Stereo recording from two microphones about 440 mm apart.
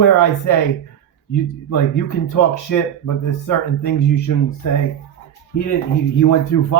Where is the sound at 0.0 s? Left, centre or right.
Left.